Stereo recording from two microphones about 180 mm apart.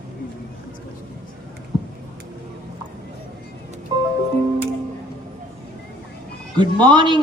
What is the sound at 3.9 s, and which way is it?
Music, 25° right (ahead or behind).